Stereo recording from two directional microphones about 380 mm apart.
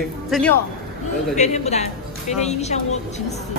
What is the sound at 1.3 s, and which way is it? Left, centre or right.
A woman's voice, centre.